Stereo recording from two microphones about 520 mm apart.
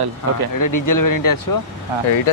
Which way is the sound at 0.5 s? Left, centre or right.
Left.